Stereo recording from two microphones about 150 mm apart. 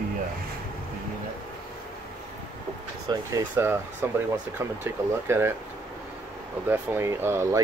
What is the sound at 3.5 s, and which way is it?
Speech, 15° right (ahead or behind).